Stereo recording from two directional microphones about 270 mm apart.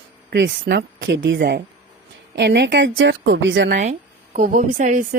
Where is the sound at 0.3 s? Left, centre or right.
Right.